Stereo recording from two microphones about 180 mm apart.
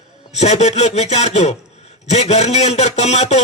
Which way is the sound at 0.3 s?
40° left (ahead or behind).